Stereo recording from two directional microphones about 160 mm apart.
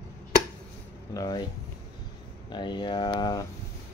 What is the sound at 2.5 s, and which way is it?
Speech, 30° left (ahead or behind).